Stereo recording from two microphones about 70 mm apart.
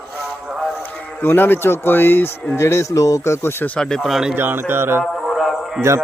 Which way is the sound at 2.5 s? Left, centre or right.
Left.